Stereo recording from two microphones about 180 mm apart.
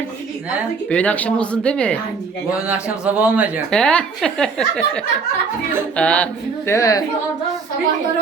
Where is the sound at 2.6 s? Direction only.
5° right (ahead or behind).